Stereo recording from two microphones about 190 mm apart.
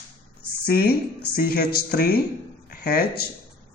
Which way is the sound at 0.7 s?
55° left (ahead or behind).